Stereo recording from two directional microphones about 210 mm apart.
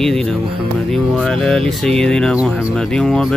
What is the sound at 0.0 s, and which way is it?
Speech, centre (ahead or behind).